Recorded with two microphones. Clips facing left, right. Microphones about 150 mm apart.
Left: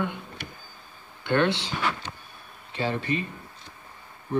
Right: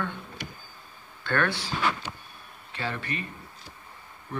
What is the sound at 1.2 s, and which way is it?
Speech, 20° left (ahead or behind).